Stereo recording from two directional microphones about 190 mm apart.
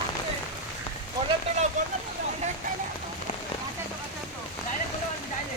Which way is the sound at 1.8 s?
40° right (ahead or behind).